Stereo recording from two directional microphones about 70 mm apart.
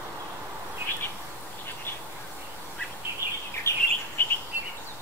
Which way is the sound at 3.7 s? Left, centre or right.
Left.